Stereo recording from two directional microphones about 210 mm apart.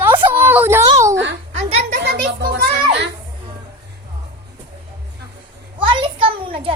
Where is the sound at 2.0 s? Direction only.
45° right (ahead or behind).